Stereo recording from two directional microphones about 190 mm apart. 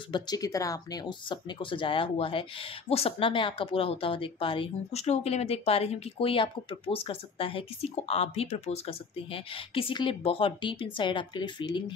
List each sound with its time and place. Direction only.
0.1 s speech: 20° left (ahead or behind)